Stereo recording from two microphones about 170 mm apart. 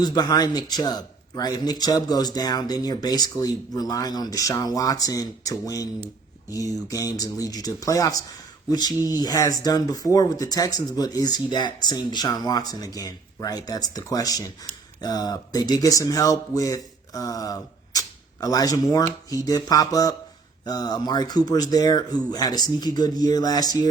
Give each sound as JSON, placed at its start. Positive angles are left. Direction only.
{"t": 0.0, "sound": "speech", "side_deg": 25}